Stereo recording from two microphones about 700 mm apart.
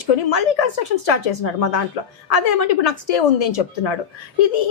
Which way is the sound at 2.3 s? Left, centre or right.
Left.